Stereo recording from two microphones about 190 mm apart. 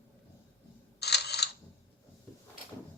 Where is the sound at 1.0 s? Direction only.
60° left (ahead or behind).